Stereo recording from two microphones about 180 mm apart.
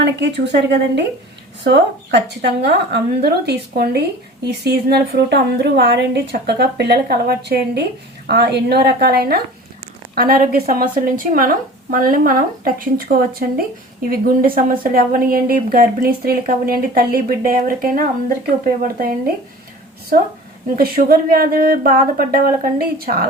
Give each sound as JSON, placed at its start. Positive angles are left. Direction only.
{"t": 0.0, "sound": "a woman's voice", "side_deg": -75}
{"t": 20.7, "sound": "a woman's voice", "side_deg": -55}